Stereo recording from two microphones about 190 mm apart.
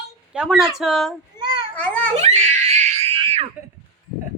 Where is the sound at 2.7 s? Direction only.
35° right (ahead or behind).